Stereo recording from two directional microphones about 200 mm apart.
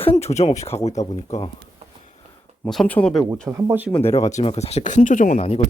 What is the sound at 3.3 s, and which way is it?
Speech, 5° right (ahead or behind).